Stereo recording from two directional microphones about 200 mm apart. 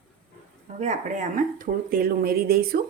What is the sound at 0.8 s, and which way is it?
Speech, 40° right (ahead or behind).